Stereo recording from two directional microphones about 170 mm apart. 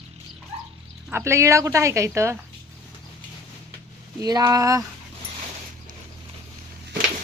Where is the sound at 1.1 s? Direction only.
15° right (ahead or behind).